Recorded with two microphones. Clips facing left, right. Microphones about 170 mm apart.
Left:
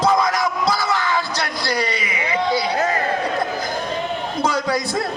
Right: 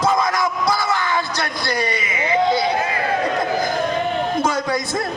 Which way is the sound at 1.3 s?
20° right (ahead or behind).